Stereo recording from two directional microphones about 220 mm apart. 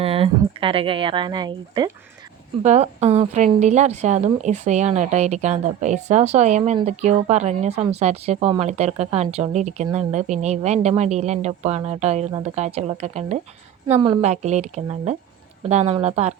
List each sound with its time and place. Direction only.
0.0 s speech: 25° right (ahead or behind)
2.6 s speech: 30° right (ahead or behind)